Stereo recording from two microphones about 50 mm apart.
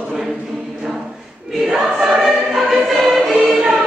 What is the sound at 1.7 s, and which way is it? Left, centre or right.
Choir, centre.